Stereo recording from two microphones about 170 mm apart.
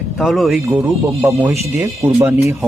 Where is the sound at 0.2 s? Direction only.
Centre (ahead or behind).